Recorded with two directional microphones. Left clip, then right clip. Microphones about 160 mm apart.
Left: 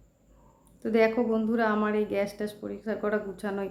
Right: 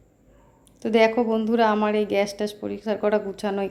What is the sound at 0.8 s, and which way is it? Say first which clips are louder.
A woman's voice: right 5 dB; 20° right (ahead or behind).